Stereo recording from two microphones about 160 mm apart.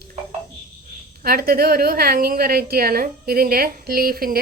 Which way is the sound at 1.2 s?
65° right (ahead or behind).